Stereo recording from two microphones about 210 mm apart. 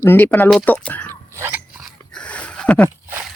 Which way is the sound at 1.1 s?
15° right (ahead or behind).